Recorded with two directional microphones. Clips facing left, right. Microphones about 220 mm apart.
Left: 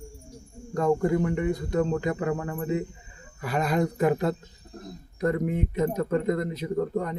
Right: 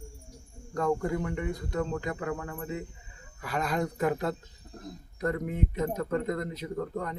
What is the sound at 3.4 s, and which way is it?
Speech, 10° left (ahead or behind).